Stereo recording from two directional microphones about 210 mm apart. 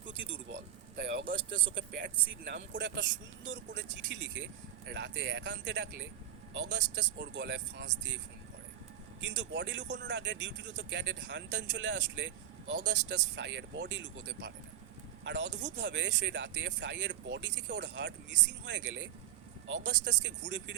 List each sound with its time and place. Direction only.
0.0 s speech: 60° right (ahead or behind)
9.2 s speech: 55° right (ahead or behind)